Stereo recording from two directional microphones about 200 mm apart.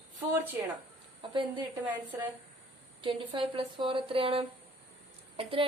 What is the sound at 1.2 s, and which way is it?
Speech, 25° right (ahead or behind).